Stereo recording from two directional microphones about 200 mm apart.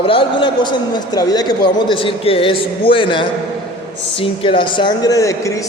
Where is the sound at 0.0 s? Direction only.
25° left (ahead or behind).